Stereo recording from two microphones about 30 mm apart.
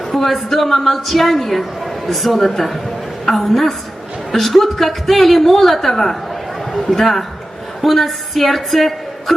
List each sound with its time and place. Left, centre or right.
0.1 s a woman's voice: centre